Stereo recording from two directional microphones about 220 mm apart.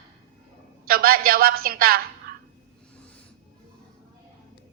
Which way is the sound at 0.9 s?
40° right (ahead or behind).